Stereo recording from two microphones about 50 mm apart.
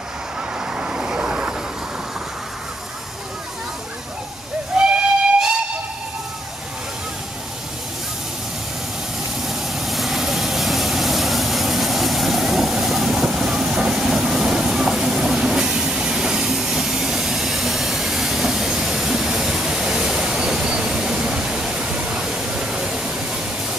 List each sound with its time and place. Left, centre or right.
0.7 s vehicle: centre
4.8 s steam whistle: centre
9.5 s vehicle: centre
20.6 s train: centre
22.2 s pink noise: centre